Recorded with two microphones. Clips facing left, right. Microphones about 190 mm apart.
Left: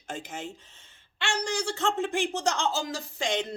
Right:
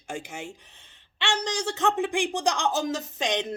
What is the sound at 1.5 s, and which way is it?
A man's voice, 15° right (ahead or behind).